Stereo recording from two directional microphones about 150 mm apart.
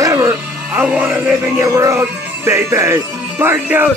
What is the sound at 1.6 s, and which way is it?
Speech, 20° right (ahead or behind).